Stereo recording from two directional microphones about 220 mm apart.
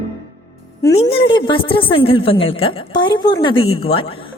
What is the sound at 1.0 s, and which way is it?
A woman's voice, 25° left (ahead or behind).